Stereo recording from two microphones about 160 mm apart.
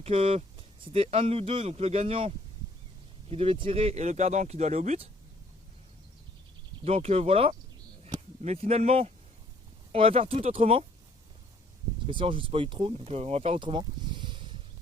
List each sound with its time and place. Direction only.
0.0 s speech: 35° right (ahead or behind)
6.8 s speech: 40° right (ahead or behind)
12.0 s speech: 35° right (ahead or behind)